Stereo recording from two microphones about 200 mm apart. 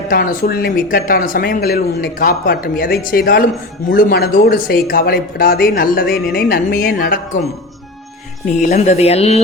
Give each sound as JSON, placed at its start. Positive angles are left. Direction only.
{"t": 0.1, "sound": "speech", "side_deg": 45}
{"t": 8.7, "sound": "speech", "side_deg": 35}